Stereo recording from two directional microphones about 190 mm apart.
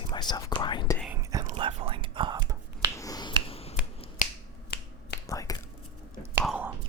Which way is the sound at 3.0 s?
20° left (ahead or behind).